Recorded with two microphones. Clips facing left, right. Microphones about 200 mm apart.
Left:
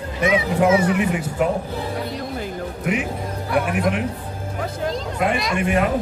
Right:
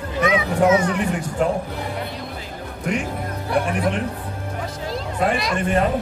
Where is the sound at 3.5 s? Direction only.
5° left (ahead or behind).